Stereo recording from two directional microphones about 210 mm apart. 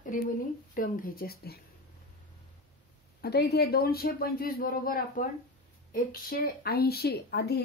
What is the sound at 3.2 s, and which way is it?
Speech, 50° left (ahead or behind).